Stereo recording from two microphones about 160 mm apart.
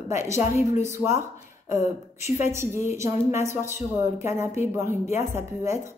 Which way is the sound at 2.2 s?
15° right (ahead or behind).